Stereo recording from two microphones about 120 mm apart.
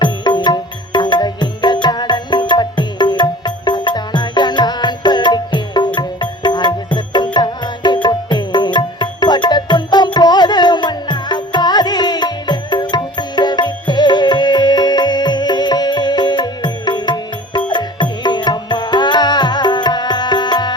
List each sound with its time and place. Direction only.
0.0 s music: 40° left (ahead or behind)